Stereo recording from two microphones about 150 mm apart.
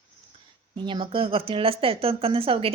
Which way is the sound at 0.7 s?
35° right (ahead or behind).